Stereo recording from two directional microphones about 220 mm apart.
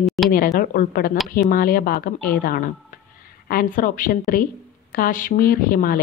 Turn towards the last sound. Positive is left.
turn(degrees=40)  # may be behind; listen again after turning